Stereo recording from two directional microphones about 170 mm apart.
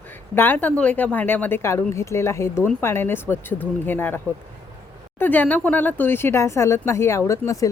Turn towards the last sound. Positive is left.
turn(degrees=20)  # may be behind; listen again after turning